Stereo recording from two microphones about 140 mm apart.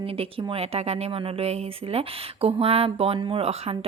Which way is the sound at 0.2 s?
45° right (ahead or behind).